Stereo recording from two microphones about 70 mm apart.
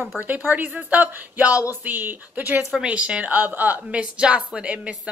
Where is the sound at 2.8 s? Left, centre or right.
Centre.